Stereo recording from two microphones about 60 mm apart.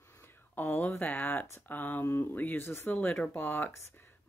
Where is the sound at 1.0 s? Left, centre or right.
Left.